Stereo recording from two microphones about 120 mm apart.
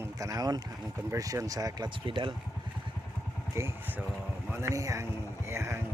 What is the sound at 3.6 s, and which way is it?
Speech, 20° right (ahead or behind).